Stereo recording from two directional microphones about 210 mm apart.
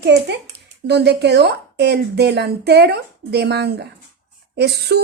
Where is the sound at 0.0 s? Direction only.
50° right (ahead or behind).